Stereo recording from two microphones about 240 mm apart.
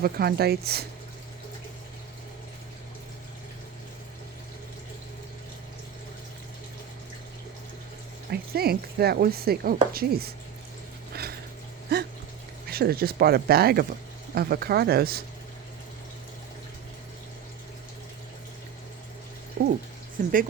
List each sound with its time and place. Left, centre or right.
0.0 s speech: right
8.3 s speech: right
11.1 s a sound: right
12.6 s speech: right
19.6 s speech: right